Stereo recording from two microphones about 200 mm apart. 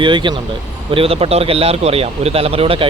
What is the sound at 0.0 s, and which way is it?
Speech, 25° right (ahead or behind).